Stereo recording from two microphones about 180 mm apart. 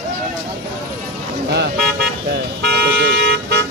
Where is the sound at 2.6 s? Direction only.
65° right (ahead or behind).